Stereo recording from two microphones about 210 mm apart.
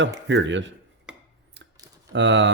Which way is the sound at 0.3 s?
60° right (ahead or behind).